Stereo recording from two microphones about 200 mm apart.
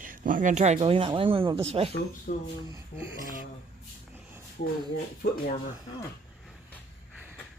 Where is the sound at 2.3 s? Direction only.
40° left (ahead or behind).